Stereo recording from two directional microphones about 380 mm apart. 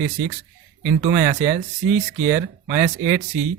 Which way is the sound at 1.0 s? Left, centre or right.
Centre.